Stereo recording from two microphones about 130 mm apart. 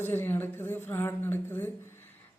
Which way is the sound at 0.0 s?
15° left (ahead or behind).